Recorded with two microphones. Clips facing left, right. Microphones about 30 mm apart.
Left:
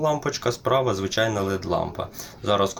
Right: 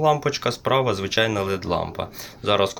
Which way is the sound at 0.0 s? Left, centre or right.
Right.